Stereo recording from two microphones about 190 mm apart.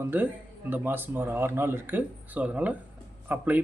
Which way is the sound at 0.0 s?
10° right (ahead or behind).